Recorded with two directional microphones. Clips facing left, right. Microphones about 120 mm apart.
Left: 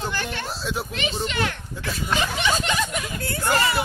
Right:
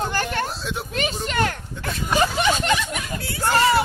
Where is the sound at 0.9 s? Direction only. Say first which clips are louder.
Right 6 dB; 45° right (ahead or behind).